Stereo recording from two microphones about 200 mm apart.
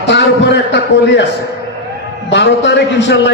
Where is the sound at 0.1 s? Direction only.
60° left (ahead or behind).